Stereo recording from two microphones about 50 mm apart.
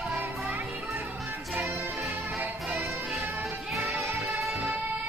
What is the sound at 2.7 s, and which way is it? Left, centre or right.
Music, right.